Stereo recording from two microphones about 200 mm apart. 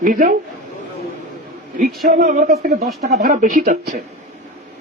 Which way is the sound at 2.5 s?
50° right (ahead or behind).